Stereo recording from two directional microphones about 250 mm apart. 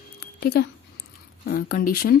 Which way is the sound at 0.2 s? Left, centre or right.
Left.